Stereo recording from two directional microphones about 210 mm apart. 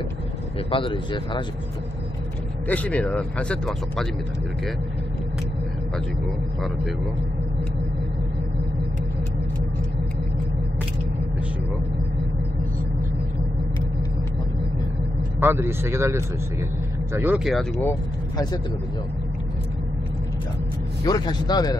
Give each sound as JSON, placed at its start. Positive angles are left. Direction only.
{"t": 0.7, "sound": "speech", "side_deg": 25}
{"t": 2.7, "sound": "speech", "side_deg": 5}
{"t": 15.4, "sound": "speech", "side_deg": -10}
{"t": 21.0, "sound": "speech", "side_deg": 20}